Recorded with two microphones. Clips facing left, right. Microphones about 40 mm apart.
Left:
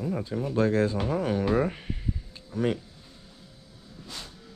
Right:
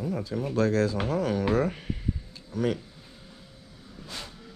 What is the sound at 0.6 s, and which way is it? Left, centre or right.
Speech, centre.